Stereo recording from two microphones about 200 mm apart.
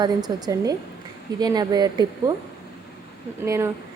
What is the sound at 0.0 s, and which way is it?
A woman's voice, 20° right (ahead or behind).